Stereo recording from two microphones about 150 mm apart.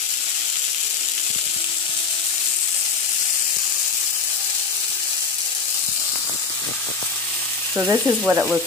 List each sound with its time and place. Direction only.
7.7 s frying: 10° right (ahead or behind)